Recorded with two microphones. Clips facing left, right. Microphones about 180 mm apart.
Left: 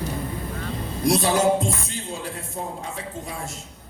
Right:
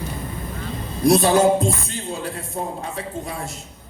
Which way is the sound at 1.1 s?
55° right (ahead or behind).